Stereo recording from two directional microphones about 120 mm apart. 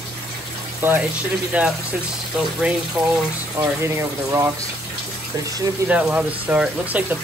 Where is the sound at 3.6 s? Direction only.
20° right (ahead or behind).